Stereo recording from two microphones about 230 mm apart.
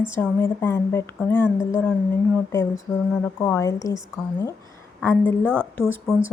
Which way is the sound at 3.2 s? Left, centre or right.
Centre.